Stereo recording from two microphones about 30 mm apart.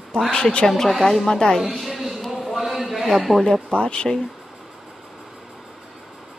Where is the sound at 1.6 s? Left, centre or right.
Centre.